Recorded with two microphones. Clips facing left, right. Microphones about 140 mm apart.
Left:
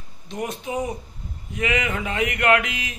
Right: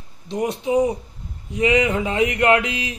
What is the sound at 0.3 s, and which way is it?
A man's voice, 30° right (ahead or behind).